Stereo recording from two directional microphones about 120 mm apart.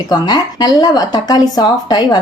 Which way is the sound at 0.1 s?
35° left (ahead or behind).